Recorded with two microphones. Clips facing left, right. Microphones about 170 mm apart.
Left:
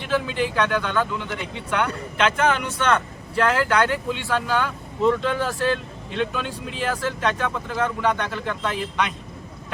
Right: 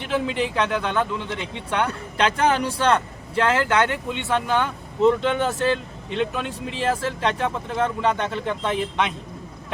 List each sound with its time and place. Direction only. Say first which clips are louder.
0.1 s speech: even; 25° right (ahead or behind)